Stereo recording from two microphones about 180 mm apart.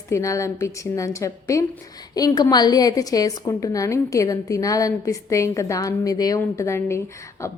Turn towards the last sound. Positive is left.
turn(degrees=15)  # may be behind; listen again after turning